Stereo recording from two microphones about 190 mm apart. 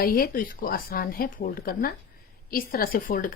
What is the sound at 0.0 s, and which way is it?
A woman's voice, 50° left (ahead or behind).